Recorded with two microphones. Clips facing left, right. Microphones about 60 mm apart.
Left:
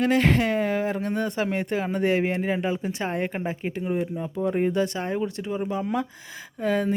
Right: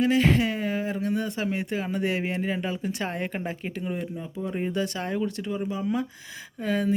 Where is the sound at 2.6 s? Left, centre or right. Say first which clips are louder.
Left 3 dB; left.